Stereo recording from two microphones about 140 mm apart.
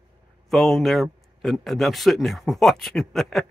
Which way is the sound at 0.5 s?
Centre (ahead or behind).